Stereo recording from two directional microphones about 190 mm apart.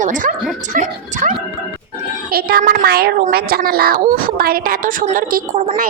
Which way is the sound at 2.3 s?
50° right (ahead or behind).